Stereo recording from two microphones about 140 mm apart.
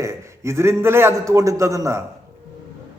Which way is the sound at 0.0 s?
20° right (ahead or behind).